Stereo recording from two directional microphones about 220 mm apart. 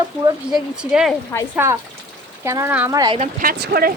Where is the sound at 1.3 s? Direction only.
15° left (ahead or behind).